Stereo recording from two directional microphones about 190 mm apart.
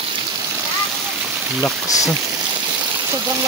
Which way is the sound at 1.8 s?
20° left (ahead or behind).